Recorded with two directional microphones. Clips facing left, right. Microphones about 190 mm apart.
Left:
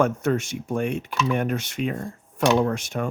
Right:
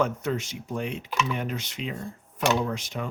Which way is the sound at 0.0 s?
50° left (ahead or behind).